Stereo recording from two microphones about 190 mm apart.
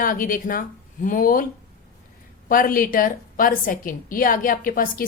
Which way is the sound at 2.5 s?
45° left (ahead or behind).